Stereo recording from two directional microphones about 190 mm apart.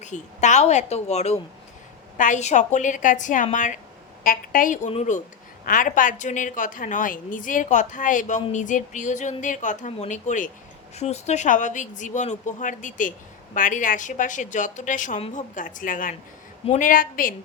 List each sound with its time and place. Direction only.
0.0 s a woman's voice: 40° left (ahead or behind)